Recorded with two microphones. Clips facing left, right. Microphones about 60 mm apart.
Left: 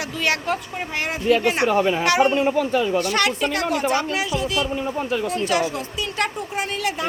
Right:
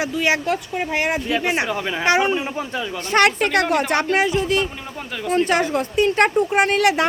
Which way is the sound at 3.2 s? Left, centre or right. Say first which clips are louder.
Right 4 dB; right.